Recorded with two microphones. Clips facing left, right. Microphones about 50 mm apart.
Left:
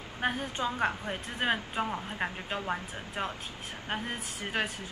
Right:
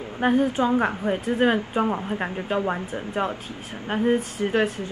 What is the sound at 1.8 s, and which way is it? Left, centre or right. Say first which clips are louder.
Speech: right 8 dB; right.